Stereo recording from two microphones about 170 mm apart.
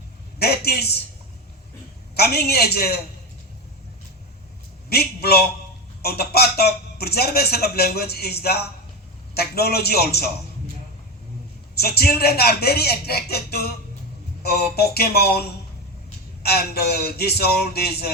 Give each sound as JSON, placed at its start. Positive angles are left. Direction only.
{"t": 0.3, "sound": "a man's voice", "side_deg": 65}
{"t": 2.1, "sound": "speech", "side_deg": 65}
{"t": 4.9, "sound": "speech", "side_deg": 65}
{"t": 11.7, "sound": "speech", "side_deg": 65}